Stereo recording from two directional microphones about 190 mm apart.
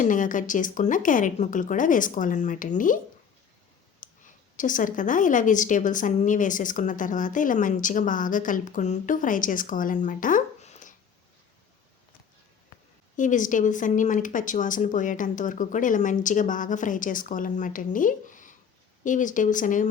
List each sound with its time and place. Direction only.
0.0 s a woman's voice: 45° left (ahead or behind)
4.0 s clicking: 45° left (ahead or behind)
4.5 s a woman's voice: 45° left (ahead or behind)
13.1 s a woman's voice: 40° left (ahead or behind)